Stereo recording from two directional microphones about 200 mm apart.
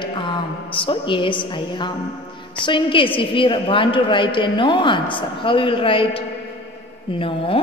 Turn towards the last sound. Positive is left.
turn(degrees=25)  # may be behind; listen again after turning